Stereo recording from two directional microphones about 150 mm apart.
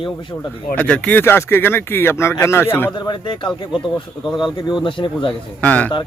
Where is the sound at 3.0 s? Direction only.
30° left (ahead or behind).